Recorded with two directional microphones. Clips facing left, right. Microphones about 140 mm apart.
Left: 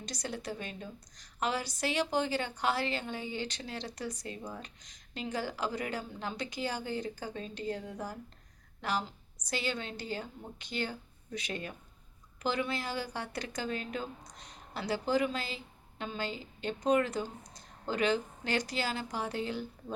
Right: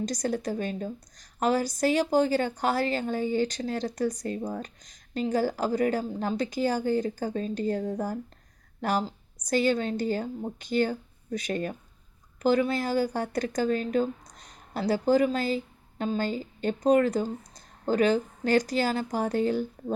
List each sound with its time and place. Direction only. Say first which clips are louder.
0.0 s a woman's voice: right 11 dB; 45° right (ahead or behind)